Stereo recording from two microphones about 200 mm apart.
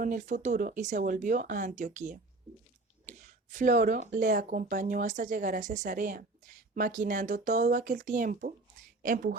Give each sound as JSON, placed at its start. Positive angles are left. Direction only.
{"t": 0.0, "sound": "speech", "side_deg": -40}
{"t": 3.1, "sound": "a sound", "side_deg": -40}
{"t": 4.1, "sound": "a woman's voice", "side_deg": -40}